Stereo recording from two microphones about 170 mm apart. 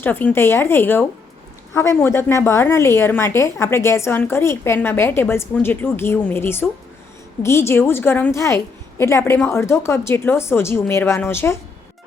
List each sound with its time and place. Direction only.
0.0 s a woman's voice: 10° left (ahead or behind)